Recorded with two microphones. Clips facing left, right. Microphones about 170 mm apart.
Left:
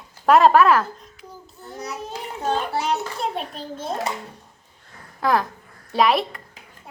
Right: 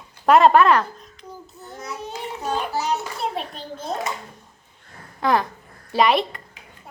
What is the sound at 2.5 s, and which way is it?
Child singing, 30° left (ahead or behind).